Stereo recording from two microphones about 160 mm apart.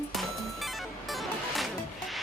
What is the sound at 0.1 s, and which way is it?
Music, centre (ahead or behind).